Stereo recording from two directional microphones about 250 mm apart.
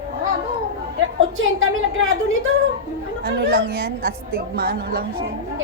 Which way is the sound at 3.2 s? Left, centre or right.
Right.